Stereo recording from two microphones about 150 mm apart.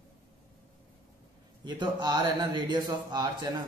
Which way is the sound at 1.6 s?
30° right (ahead or behind).